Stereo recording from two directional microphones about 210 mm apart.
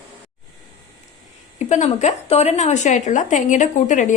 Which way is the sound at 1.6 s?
35° left (ahead or behind).